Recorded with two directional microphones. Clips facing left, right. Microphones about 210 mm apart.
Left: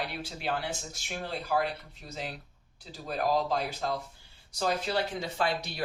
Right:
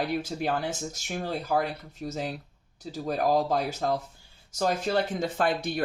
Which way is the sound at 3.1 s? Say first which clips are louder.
Right 4 dB; 45° right (ahead or behind).